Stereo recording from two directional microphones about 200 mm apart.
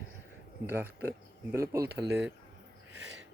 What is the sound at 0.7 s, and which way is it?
Speech, 10° right (ahead or behind).